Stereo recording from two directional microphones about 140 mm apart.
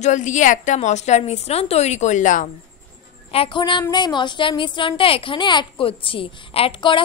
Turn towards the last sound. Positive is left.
turn(degrees=35)  # may be behind; listen again after turning